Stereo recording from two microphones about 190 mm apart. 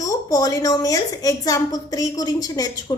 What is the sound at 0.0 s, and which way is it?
A woman's voice, 20° left (ahead or behind).